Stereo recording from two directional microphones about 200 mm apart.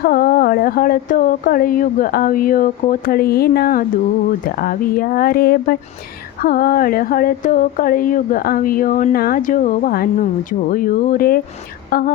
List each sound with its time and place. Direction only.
0.0 s a woman's voice: 50° left (ahead or behind)